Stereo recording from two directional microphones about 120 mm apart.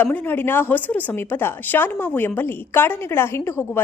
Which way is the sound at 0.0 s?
15° left (ahead or behind).